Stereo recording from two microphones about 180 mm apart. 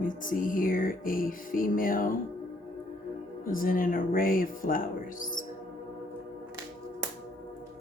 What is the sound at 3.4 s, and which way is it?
Music, 50° left (ahead or behind).